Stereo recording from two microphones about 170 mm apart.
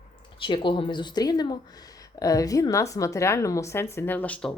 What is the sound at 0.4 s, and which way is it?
Speech, 30° left (ahead or behind).